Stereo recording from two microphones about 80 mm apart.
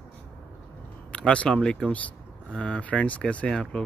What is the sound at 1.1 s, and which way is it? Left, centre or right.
Speech, centre.